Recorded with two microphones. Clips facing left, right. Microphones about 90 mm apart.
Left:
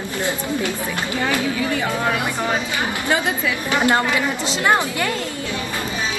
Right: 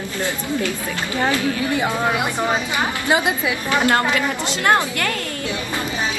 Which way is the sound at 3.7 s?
20° left (ahead or behind).